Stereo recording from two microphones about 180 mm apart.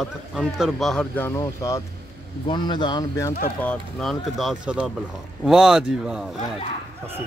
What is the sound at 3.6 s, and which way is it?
Speech, 5° left (ahead or behind).